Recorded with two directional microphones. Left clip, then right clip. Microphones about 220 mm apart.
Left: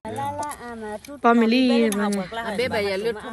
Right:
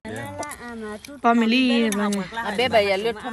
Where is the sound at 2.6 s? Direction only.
20° right (ahead or behind).